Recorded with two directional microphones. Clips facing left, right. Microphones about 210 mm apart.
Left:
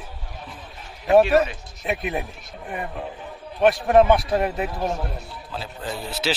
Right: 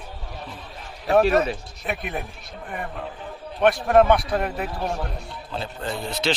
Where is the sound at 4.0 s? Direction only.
Centre (ahead or behind).